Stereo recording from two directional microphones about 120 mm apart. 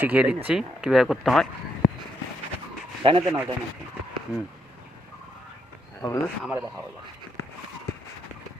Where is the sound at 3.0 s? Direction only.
45° right (ahead or behind).